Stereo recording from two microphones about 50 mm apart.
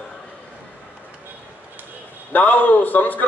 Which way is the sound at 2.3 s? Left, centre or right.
Left.